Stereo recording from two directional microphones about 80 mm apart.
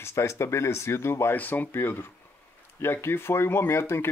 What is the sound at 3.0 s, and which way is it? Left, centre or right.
Speech, left.